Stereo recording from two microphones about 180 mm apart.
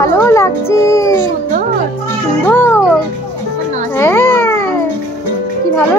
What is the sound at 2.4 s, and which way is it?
Music, 15° left (ahead or behind).